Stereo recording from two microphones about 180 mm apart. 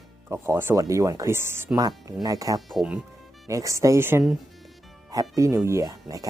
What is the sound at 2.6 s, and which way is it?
Speech, centre (ahead or behind).